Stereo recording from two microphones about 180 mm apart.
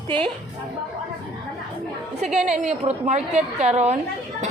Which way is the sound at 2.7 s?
40° right (ahead or behind).